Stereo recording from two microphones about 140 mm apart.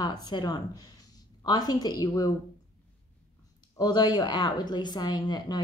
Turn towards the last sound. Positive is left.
turn(degrees=30)  # may be behind; listen again after turning